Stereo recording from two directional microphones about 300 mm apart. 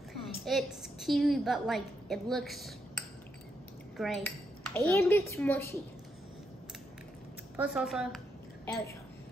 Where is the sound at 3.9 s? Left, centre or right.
Centre.